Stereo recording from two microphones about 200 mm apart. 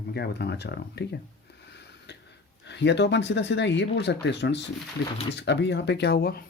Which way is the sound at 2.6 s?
60° left (ahead or behind).